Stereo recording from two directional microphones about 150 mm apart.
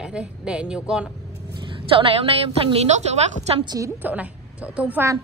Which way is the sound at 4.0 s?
10° right (ahead or behind).